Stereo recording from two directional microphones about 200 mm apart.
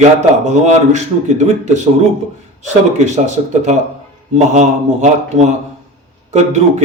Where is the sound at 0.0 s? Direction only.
35° right (ahead or behind).